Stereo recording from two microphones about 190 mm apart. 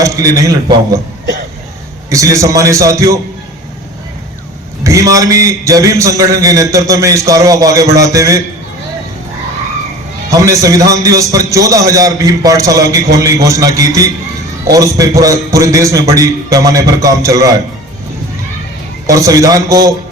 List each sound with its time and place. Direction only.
0.0 s a man's voice: 15° right (ahead or behind)
2.0 s a man's voice: 15° right (ahead or behind)
4.8 s a man's voice: 15° right (ahead or behind)
10.2 s a man's voice: 15° right (ahead or behind)
19.0 s a man's voice: 15° right (ahead or behind)